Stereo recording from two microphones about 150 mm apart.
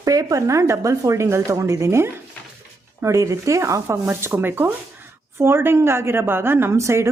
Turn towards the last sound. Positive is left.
turn(degrees=-20)  # may be behind; listen again after turning